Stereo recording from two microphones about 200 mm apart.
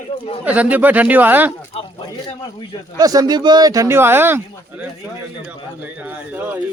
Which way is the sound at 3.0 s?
20° right (ahead or behind).